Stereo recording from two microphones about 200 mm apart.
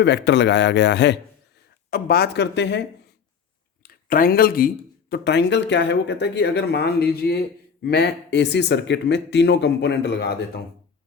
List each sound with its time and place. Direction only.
0.0 s speech: 60° left (ahead or behind)
3.8 s speech: 45° left (ahead or behind)